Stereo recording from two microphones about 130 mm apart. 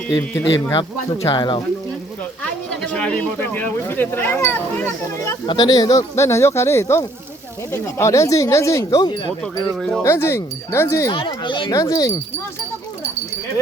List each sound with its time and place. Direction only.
0.4 s speech: 30° left (ahead or behind)
2.4 s speech: 10° left (ahead or behind)
5.5 s speech: 35° left (ahead or behind)
9.4 s speech: 5° left (ahead or behind)
10.0 s speech: 20° left (ahead or behind)
11.1 s speech: 40° left (ahead or behind)